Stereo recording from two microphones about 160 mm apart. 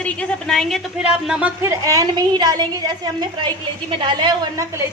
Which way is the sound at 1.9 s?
25° right (ahead or behind).